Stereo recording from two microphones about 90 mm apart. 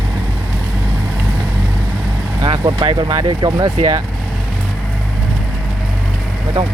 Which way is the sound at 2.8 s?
65° right (ahead or behind).